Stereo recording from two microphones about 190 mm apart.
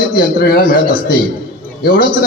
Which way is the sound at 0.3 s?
50° left (ahead or behind).